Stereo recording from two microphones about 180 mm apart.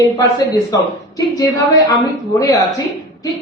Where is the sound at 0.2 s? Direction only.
20° left (ahead or behind).